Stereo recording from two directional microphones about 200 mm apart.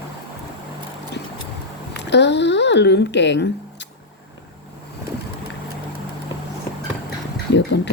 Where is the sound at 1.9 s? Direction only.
60° left (ahead or behind).